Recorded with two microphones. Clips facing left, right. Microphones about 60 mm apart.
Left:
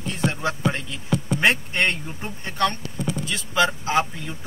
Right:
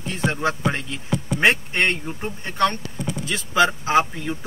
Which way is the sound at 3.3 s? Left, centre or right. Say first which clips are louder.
Right 3 dB; centre.